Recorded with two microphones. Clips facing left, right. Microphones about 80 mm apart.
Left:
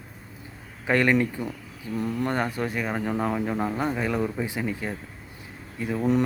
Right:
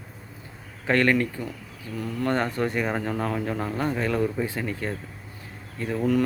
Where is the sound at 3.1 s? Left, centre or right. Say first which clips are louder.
Left 1 dB; centre.